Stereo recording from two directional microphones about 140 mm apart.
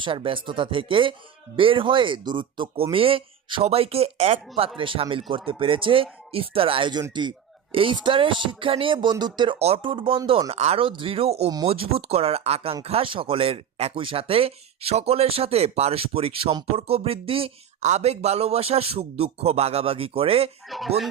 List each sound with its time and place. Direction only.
0.0 s speech: 40° right (ahead or behind)
9.6 s speech: 45° right (ahead or behind)
17.8 s speech: 50° right (ahead or behind)
20.7 s speech: centre (ahead or behind)